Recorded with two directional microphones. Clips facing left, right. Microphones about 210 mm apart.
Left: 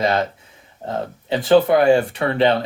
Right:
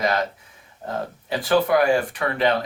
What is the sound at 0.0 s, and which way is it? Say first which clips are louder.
Speech: left 3 dB; 25° left (ahead or behind).